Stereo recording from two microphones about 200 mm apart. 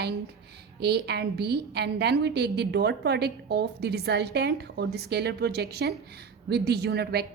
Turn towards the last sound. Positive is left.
turn(degrees=-55)  # may be behind; listen again after turning